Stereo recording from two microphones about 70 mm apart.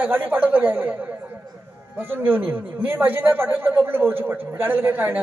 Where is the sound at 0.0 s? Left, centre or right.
Right.